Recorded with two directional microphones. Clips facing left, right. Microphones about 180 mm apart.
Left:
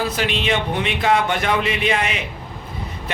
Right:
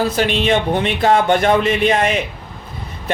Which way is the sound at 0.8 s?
45° right (ahead or behind).